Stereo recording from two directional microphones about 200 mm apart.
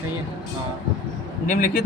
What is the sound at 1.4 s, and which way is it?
Speech, 40° left (ahead or behind).